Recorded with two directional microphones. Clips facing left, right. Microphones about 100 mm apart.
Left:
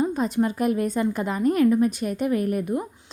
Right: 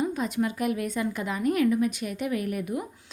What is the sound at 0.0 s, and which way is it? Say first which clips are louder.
A woman's voice: left 4 dB; 35° left (ahead or behind).